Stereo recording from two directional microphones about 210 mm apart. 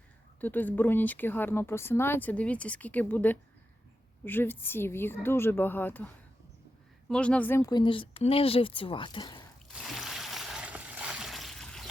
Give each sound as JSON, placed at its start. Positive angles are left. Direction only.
{"t": 0.3, "sound": "speech", "side_deg": 10}
{"t": 7.1, "sound": "speech", "side_deg": 5}
{"t": 9.8, "sound": "a sound", "side_deg": 0}